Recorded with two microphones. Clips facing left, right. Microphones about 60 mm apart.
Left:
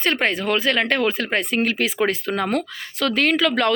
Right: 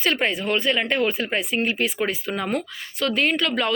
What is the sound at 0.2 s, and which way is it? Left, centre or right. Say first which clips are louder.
Speech: left 2 dB; left.